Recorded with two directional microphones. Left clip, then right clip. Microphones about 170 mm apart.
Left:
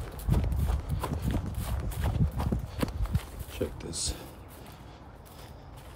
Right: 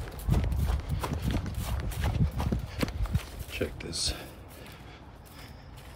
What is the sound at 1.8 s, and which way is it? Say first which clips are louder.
Clip-clop: even; 10° left (ahead or behind).